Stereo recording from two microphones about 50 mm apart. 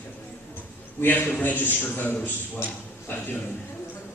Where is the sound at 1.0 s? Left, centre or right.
Left.